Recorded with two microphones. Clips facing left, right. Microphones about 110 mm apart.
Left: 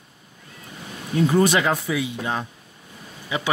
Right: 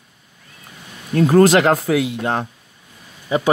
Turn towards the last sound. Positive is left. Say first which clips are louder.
# right 8 dB
turn(degrees=-40)  # may be behind; listen again after turning